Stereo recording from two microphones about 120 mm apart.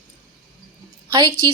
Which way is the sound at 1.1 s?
30° right (ahead or behind).